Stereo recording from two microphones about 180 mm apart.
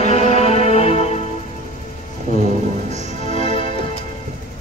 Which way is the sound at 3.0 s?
30° left (ahead or behind).